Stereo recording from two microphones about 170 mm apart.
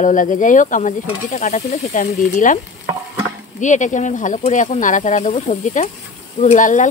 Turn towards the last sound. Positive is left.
turn(degrees=50)  # may be behind; listen again after turning